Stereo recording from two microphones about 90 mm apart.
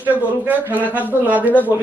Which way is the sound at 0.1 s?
20° right (ahead or behind).